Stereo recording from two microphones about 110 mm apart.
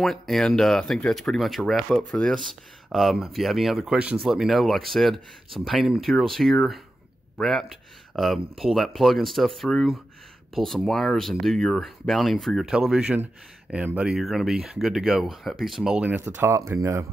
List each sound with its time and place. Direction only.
0.0 s speech: centre (ahead or behind)
16.2 s speech: 25° right (ahead or behind)